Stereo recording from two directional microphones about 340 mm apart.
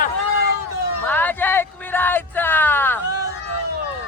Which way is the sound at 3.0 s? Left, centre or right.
Centre.